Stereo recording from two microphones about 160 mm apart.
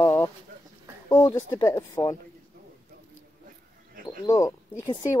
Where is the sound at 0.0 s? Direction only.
20° left (ahead or behind).